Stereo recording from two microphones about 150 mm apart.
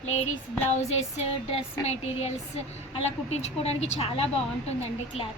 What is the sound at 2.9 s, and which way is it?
A woman's voice, 45° left (ahead or behind).